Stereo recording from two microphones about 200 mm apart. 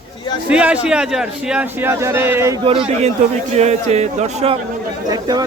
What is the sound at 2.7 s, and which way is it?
Speech, 30° right (ahead or behind).